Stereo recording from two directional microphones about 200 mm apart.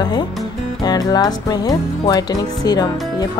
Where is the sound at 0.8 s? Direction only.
20° left (ahead or behind).